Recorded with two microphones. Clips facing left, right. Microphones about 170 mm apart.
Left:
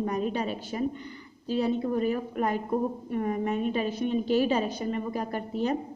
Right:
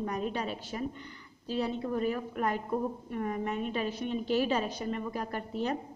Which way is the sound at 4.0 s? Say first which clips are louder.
Left 5 dB; 45° left (ahead or behind).